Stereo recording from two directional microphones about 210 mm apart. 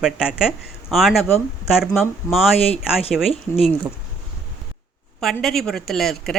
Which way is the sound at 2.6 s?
30° left (ahead or behind).